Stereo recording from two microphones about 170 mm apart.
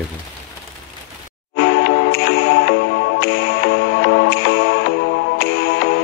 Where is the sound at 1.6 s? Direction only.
65° left (ahead or behind).